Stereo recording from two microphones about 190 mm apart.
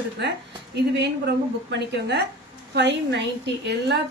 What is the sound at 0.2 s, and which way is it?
A woman's voice, 60° right (ahead or behind).